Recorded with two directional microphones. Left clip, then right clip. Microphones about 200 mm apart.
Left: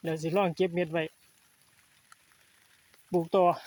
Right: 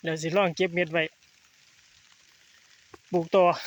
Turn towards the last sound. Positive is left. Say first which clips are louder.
# right 3 dB
turn(degrees=-10)  # may be behind; listen again after turning